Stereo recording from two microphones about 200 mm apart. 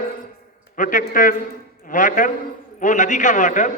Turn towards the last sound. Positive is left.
turn(degrees=40)  # may be behind; listen again after turning